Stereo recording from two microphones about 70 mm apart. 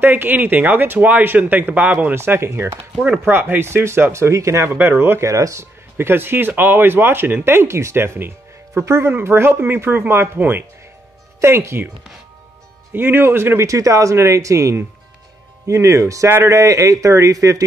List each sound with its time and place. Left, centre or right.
0.0 s speech: right
2.1 s speech: right
3.0 s speech: right
5.3 s speech: right
12.9 s speech: right